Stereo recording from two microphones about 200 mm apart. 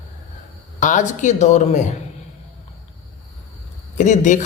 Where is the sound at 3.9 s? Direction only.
35° left (ahead or behind).